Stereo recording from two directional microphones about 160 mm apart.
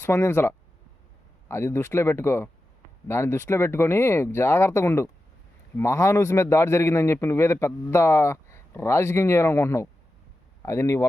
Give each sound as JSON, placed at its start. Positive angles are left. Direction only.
{"t": 0.0, "sound": "a man's voice", "side_deg": 15}